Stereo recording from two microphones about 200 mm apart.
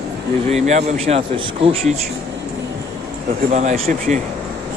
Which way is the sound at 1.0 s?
30° right (ahead or behind).